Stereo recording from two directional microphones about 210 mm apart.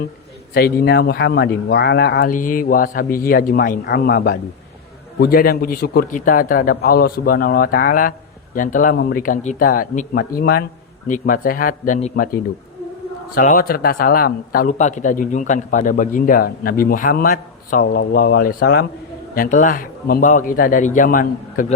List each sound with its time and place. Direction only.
0.5 s a man's voice: 50° left (ahead or behind)